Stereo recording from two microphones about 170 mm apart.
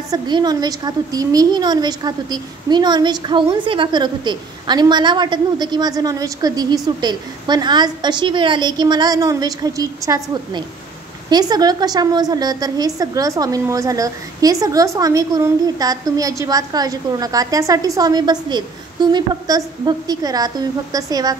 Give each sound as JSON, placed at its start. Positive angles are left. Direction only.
{"t": 0.1, "sound": "a woman's voice", "side_deg": -25}